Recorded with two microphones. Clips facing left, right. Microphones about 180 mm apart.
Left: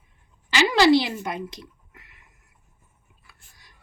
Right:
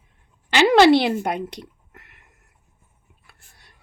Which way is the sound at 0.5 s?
60° right (ahead or behind).